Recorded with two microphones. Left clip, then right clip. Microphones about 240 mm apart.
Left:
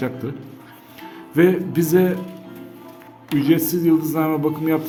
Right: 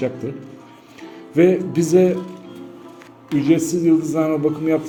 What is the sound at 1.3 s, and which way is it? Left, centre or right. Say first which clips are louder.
Speech: right 1 dB; centre.